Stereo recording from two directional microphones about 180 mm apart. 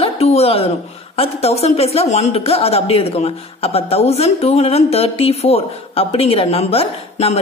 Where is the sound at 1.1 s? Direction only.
35° left (ahead or behind).